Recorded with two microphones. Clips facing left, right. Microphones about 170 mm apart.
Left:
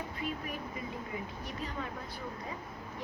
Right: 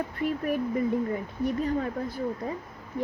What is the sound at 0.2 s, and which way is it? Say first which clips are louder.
Speech: right 12 dB; 55° right (ahead or behind).